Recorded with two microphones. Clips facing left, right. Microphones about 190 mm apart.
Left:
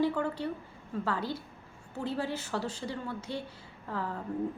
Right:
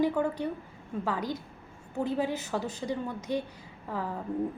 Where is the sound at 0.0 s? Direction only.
15° right (ahead or behind).